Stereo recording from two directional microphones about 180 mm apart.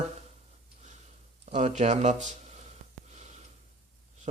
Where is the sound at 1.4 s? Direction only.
40° right (ahead or behind).